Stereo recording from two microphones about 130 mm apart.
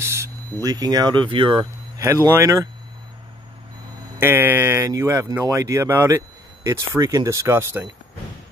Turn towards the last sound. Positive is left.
turn(degrees=-20)  # may be behind; listen again after turning